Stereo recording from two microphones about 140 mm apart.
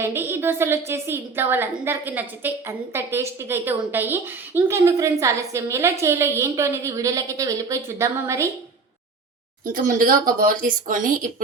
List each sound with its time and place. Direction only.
0.0 s a woman's voice: 15° right (ahead or behind)
9.6 s speech: 75° right (ahead or behind)